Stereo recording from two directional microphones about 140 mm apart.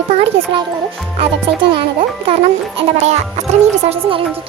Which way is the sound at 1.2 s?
40° right (ahead or behind).